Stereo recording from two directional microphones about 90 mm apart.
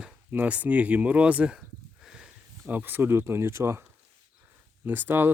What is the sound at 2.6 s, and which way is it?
Speech, 20° right (ahead or behind).